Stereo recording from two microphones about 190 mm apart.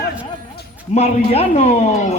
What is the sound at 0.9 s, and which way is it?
Speech, 35° left (ahead or behind).